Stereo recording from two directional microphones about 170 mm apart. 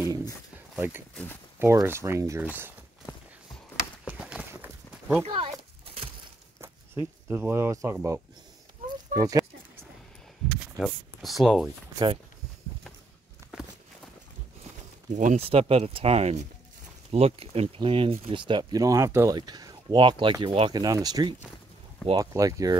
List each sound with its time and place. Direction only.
0.0 s a sound: 15° right (ahead or behind)
0.7 s speech: 10° right (ahead or behind)
1.1 s speech: 10° left (ahead or behind)
1.6 s speech: 15° right (ahead or behind)
4.0 s horse: 5° right (ahead or behind)
5.2 s speech: 30° right (ahead or behind)
7.2 s speech: 15° right (ahead or behind)
9.1 s a sound: 20° right (ahead or behind)
10.8 s speech: centre (ahead or behind)
15.0 s speech: 45° right (ahead or behind)
15.4 s speech: 35° right (ahead or behind)